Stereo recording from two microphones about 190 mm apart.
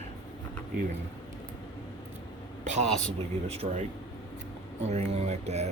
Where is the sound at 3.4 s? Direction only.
35° right (ahead or behind).